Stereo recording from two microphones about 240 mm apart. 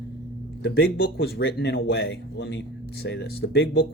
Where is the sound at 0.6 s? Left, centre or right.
Left.